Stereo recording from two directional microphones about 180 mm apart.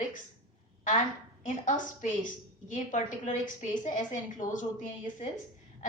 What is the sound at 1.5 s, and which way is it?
Speech, 45° left (ahead or behind).